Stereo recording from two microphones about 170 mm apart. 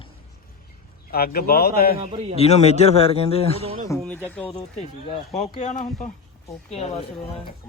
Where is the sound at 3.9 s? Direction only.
10° left (ahead or behind).